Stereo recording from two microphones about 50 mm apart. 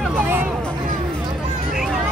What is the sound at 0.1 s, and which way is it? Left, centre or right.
Hubbub, right.